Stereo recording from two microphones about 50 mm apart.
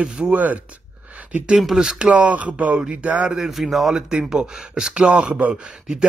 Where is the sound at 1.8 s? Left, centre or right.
Centre.